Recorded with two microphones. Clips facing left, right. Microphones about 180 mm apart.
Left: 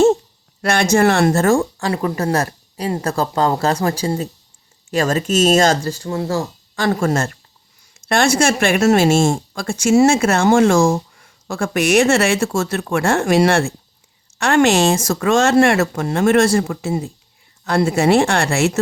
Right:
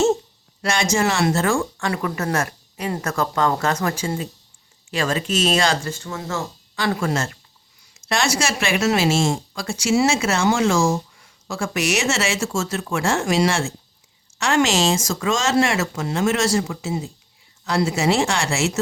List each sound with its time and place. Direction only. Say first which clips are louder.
0.6 s speech: left 6 dB; 60° left (ahead or behind)